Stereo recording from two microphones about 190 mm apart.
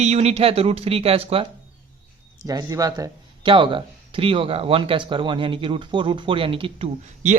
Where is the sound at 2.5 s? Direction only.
20° right (ahead or behind).